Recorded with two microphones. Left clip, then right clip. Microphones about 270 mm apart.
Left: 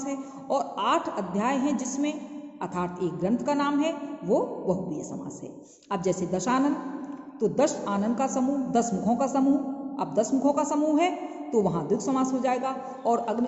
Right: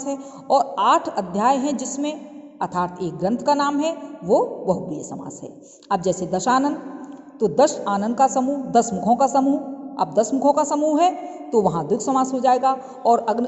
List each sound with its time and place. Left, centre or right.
0.0 s a man's voice: right
5.9 s a man's voice: right